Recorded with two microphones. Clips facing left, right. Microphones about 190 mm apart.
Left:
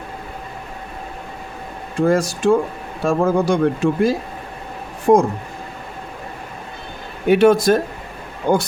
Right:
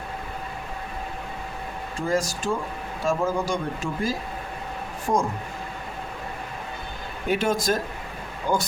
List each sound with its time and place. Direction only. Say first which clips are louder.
2.0 s speech: left 9 dB; 65° left (ahead or behind)
5.1 s speech: left 11 dB; 55° left (ahead or behind)
7.3 s speech: left 11 dB; 65° left (ahead or behind)